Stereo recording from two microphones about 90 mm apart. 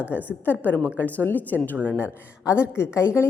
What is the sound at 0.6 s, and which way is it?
Speech, 15° left (ahead or behind).